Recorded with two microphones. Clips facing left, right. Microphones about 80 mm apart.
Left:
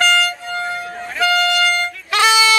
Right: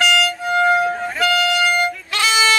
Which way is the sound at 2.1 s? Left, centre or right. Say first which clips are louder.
Left 5 dB; left.